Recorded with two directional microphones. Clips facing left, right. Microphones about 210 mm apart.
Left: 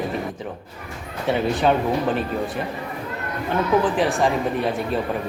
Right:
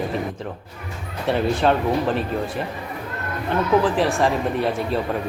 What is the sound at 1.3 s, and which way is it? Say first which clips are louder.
Speech: even; centre (ahead or behind).